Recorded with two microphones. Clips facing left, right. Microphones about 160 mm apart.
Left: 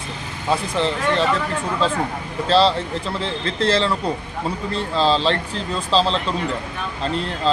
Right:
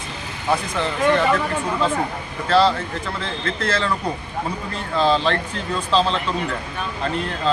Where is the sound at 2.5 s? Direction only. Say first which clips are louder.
Even; 25° left (ahead or behind).